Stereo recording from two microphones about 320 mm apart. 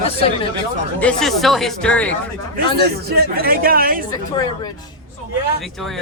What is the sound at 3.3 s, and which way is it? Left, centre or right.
Speech, right.